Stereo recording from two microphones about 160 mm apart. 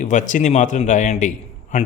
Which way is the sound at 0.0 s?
50° left (ahead or behind).